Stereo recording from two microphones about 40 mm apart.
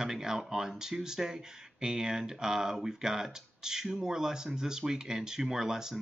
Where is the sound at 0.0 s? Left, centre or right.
Centre.